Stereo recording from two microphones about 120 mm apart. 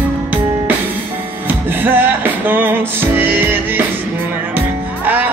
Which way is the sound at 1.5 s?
15° right (ahead or behind).